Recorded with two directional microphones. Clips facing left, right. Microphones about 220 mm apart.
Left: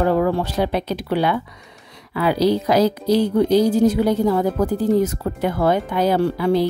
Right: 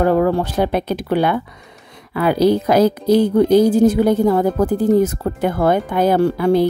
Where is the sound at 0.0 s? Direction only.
50° right (ahead or behind).